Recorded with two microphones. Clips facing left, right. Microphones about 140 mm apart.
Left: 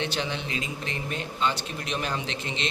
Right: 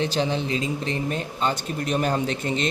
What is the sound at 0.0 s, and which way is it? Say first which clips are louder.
A man's voice: right 6 dB; 35° right (ahead or behind).